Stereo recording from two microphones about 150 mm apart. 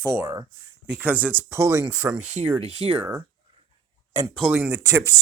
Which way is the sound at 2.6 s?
40° right (ahead or behind).